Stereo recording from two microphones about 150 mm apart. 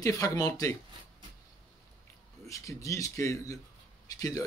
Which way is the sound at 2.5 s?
20° left (ahead or behind).